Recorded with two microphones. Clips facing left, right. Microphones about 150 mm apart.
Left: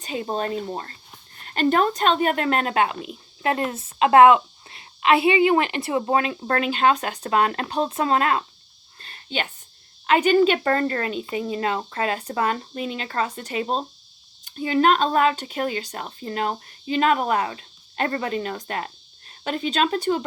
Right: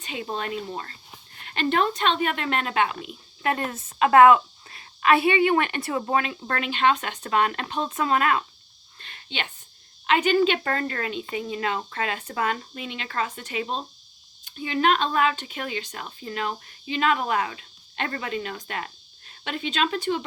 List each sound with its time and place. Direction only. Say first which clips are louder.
0.0 s speech: left 5 dB; 35° left (ahead or behind)
9.0 s a sound: left 5 dB; 35° left (ahead or behind)
10.1 s speech: left 3 dB; 45° left (ahead or behind)